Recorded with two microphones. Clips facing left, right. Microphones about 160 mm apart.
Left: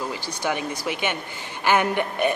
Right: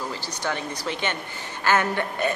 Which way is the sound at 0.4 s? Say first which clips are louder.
Left 3 dB; 10° left (ahead or behind).